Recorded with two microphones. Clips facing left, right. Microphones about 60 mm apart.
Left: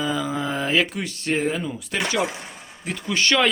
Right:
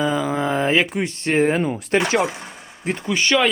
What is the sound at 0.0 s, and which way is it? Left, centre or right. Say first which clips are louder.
Speech: right 4 dB; right.